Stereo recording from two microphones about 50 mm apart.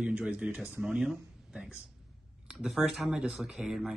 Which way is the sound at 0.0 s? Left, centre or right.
Right.